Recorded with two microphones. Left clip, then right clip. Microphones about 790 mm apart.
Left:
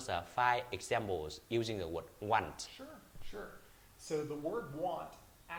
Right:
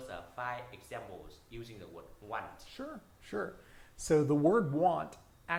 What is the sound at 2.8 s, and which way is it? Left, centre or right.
Speech, right.